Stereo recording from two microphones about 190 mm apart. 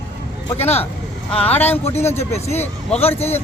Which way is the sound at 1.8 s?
35° left (ahead or behind).